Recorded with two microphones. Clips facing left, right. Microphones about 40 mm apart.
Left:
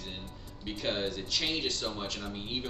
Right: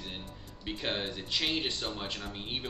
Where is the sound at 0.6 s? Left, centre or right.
Centre.